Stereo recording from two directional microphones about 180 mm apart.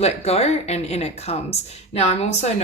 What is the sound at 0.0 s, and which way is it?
A woman's voice, 35° left (ahead or behind).